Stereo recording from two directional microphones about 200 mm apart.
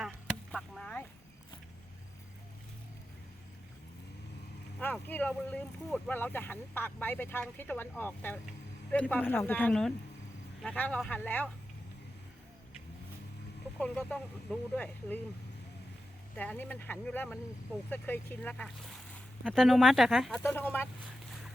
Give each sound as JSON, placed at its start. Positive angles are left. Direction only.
{"t": 0.0, "sound": "chop", "side_deg": 0}
{"t": 4.8, "sound": "speech", "side_deg": 10}
{"t": 13.7, "sound": "speech", "side_deg": 5}
{"t": 16.3, "sound": "speech", "side_deg": 5}
{"t": 20.4, "sound": "speech", "side_deg": 10}